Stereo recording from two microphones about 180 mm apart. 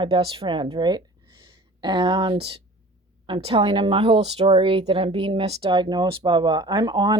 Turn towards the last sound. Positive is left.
turn(degrees=-25)  # may be behind; listen again after turning